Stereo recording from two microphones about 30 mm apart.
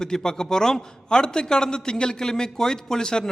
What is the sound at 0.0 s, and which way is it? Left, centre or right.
A man's voice, left.